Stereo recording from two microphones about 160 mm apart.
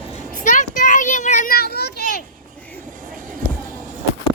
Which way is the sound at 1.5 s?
80° left.